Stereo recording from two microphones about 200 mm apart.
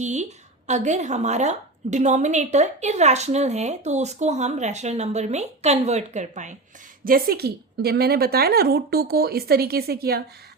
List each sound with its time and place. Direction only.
0.0 s a woman's voice: 35° right (ahead or behind)
7.0 s a woman's voice: 45° right (ahead or behind)